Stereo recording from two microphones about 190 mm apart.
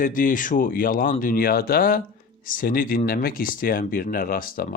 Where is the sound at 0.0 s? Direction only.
45° left (ahead or behind).